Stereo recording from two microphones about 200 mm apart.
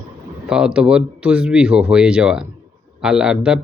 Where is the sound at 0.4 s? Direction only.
5° right (ahead or behind).